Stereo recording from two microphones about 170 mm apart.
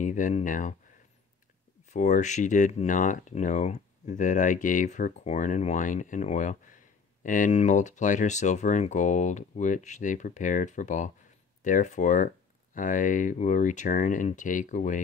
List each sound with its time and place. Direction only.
0.0 s speech: 45° left (ahead or behind)
1.9 s speech: 45° left (ahead or behind)